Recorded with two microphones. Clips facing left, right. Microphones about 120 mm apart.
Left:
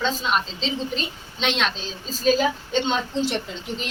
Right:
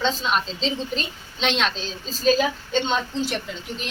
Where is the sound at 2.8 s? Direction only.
20° left (ahead or behind).